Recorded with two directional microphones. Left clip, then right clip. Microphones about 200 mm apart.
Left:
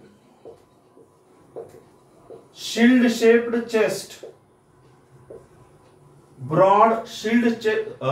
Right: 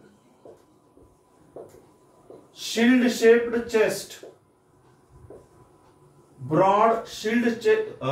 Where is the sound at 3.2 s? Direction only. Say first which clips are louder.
Right 1 dB; 15° left (ahead or behind).